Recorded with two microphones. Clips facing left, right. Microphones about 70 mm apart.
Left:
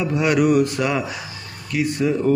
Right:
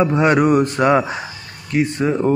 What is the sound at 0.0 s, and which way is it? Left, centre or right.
A man's voice, right.